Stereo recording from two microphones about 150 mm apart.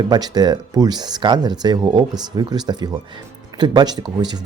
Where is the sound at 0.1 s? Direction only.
25° right (ahead or behind).